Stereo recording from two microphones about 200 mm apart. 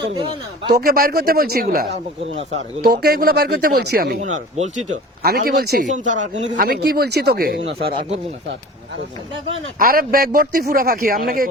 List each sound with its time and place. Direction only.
0.7 s speech: 50° right (ahead or behind)
4.2 s speech: 35° right (ahead or behind)
5.2 s speech: 50° right (ahead or behind)
9.7 s speech: 45° right (ahead or behind)